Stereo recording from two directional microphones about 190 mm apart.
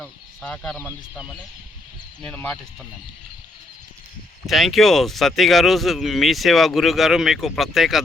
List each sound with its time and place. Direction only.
0.0 s speech: 5° left (ahead or behind)
4.4 s speech: centre (ahead or behind)